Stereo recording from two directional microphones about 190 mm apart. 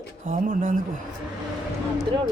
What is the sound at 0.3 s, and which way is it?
Speech, 45° right (ahead or behind).